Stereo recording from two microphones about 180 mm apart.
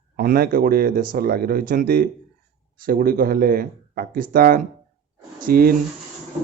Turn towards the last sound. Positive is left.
turn(degrees=-55)  # may be behind; listen again after turning